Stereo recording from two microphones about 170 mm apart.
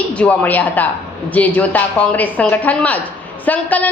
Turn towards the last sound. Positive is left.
turn(degrees=10)  # may be behind; listen again after turning